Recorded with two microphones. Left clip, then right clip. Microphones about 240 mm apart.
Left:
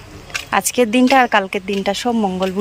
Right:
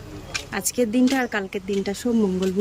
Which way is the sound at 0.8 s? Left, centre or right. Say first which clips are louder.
Left 9 dB; centre.